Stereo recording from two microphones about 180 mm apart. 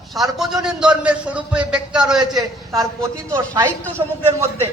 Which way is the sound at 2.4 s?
20° right (ahead or behind).